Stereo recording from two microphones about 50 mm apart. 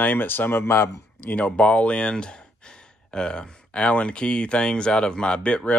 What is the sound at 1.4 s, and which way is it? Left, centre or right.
Speech, left.